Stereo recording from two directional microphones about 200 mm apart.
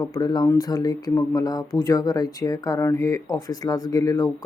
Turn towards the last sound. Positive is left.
turn(degrees=15)  # may be behind; listen again after turning